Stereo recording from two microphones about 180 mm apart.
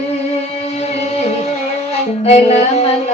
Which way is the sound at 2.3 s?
35° left (ahead or behind).